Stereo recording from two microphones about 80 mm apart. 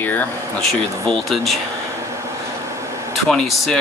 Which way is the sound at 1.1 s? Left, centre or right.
Centre.